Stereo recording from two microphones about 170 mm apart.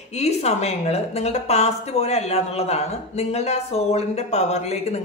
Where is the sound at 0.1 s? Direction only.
40° left (ahead or behind).